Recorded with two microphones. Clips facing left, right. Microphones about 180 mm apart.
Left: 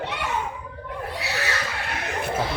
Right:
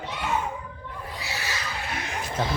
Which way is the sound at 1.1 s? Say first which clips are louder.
Left 5 dB; 70° left (ahead or behind).